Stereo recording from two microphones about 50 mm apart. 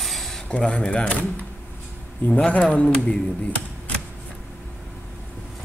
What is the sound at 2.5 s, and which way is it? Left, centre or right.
Speech, left.